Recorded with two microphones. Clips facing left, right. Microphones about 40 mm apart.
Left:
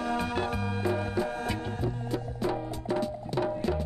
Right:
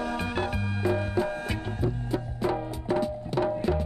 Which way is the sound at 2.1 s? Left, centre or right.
Right.